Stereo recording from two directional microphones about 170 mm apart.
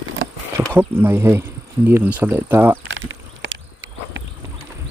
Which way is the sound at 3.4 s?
90° right.